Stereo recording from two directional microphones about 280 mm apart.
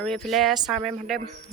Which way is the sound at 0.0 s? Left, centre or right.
Centre.